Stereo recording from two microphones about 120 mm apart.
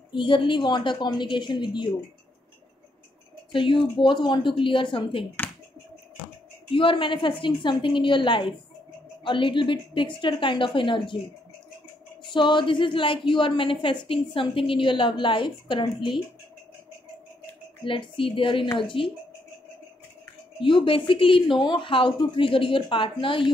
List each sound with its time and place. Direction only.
0.1 s a woman's voice: 45° left (ahead or behind)
3.5 s a woman's voice: 45° left (ahead or behind)
6.7 s a woman's voice: 45° left (ahead or behind)
12.2 s a woman's voice: 40° left (ahead or behind)
17.8 s a woman's voice: 45° left (ahead or behind)
20.6 s a woman's voice: 45° left (ahead or behind)